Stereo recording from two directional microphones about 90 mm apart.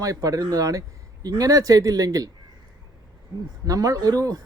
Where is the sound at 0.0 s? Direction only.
40° right (ahead or behind).